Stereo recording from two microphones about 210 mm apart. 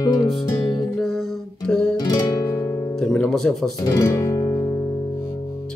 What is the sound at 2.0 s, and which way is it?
Music, 15° left (ahead or behind).